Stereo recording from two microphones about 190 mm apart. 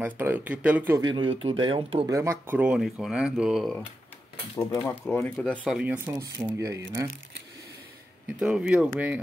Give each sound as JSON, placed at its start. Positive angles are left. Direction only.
{"t": 0.0, "sound": "speech", "side_deg": -10}
{"t": 1.0, "sound": "speech", "side_deg": -25}
{"t": 2.0, "sound": "speech", "side_deg": -15}
{"t": 4.6, "sound": "speech", "side_deg": 10}
{"t": 5.6, "sound": "speech", "side_deg": -5}
{"t": 8.4, "sound": "speech", "side_deg": -5}